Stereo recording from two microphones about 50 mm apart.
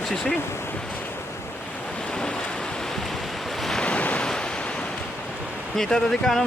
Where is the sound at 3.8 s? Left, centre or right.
Left.